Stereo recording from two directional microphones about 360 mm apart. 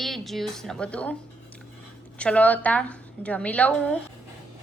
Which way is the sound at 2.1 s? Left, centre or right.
Centre.